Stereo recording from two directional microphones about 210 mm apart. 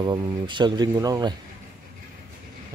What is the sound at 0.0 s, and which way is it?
Speech, 20° right (ahead or behind).